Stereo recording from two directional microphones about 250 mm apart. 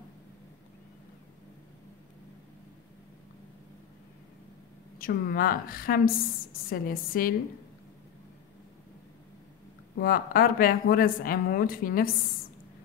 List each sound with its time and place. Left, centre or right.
4.9 s a woman's voice: left
9.9 s a woman's voice: left